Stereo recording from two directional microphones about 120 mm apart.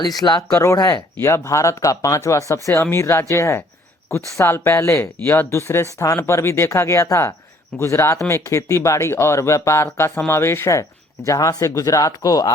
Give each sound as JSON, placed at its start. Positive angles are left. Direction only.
{"t": 0.2, "sound": "speech", "side_deg": 35}